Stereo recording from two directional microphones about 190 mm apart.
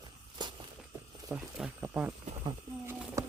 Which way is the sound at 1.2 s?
5° right (ahead or behind).